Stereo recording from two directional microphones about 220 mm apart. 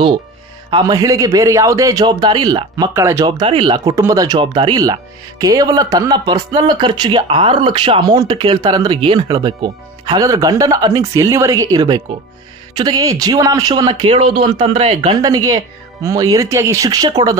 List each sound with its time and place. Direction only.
0.7 s speech: 20° right (ahead or behind)